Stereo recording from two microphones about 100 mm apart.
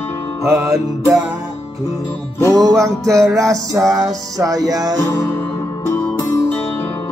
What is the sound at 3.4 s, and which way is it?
Music, 35° right (ahead or behind).